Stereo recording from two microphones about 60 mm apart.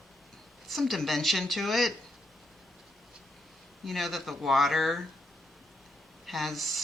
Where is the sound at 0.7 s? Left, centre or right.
Centre.